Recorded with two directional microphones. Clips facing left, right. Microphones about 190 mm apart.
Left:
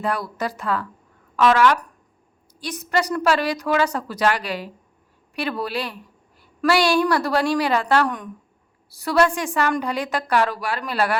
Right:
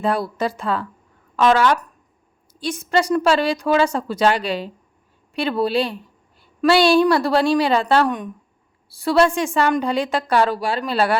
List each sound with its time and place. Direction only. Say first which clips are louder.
0.0 s a woman's voice: right 4 dB; 25° right (ahead or behind)